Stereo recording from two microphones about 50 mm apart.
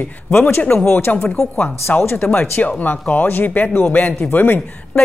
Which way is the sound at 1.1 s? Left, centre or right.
Left.